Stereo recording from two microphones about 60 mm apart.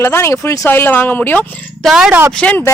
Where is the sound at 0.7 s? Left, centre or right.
Left.